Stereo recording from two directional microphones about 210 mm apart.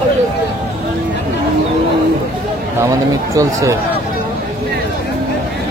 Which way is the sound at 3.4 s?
15° right (ahead or behind).